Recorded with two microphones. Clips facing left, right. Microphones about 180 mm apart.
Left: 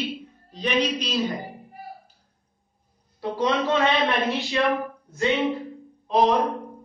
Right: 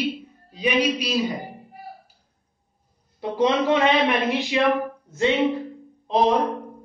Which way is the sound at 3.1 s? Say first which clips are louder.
Right 3 dB; 20° right (ahead or behind).